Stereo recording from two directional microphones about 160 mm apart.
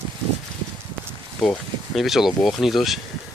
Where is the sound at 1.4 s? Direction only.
5° left (ahead or behind).